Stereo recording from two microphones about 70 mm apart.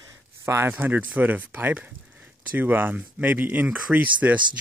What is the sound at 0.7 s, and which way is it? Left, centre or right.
Speech, right.